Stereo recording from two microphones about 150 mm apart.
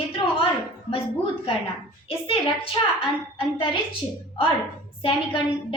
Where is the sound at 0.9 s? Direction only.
35° left (ahead or behind).